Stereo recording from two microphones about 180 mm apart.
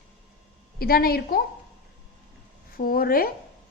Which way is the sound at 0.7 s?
55° left (ahead or behind).